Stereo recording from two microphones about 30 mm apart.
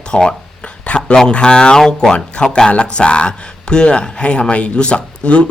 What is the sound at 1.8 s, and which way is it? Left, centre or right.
Speech, centre.